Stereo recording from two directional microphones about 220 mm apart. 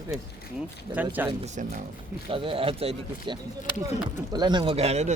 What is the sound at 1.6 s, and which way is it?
Speech, 35° right (ahead or behind).